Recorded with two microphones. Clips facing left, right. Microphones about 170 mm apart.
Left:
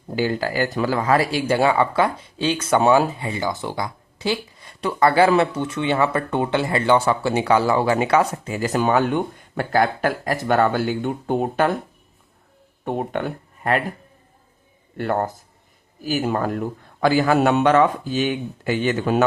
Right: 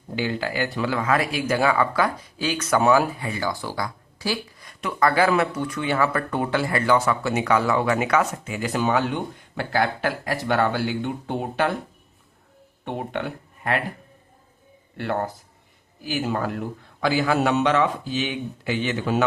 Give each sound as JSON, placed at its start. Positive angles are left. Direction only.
{"t": 0.2, "sound": "speech", "side_deg": 40}
{"t": 12.8, "sound": "speech", "side_deg": 45}
{"t": 14.9, "sound": "speech", "side_deg": 45}